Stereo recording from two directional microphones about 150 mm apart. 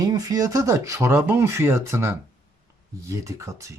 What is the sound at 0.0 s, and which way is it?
Speech, 25° right (ahead or behind).